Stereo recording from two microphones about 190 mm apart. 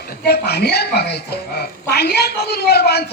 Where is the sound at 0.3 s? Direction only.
55° left (ahead or behind).